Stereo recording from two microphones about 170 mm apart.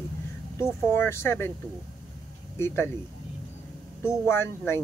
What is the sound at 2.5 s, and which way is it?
Speech, 15° left (ahead or behind).